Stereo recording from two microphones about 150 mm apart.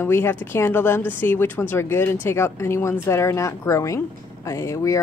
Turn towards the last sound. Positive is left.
turn(degrees=20)  # may be behind; listen again after turning